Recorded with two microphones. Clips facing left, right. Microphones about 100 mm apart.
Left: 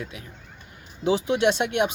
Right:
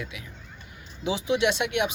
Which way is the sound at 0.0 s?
40° left (ahead or behind).